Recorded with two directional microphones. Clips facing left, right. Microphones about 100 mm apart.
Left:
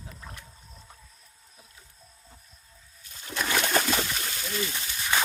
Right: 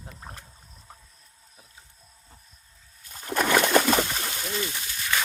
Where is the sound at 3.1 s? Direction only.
45° right (ahead or behind).